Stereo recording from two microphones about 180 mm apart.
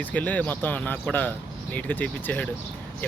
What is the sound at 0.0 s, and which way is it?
Speech, 10° left (ahead or behind).